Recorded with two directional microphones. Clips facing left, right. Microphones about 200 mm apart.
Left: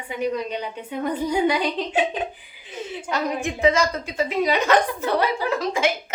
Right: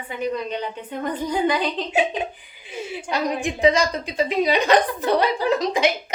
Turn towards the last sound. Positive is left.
turn(degrees=-20)  # may be behind; listen again after turning